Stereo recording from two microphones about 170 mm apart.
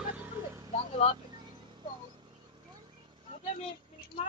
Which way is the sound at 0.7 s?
35° left (ahead or behind).